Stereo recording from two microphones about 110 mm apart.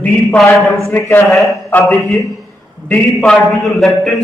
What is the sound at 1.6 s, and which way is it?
Speech, 20° left (ahead or behind).